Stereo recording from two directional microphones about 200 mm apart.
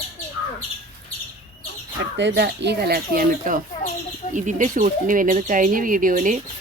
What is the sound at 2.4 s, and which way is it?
Speech, 55° right (ahead or behind).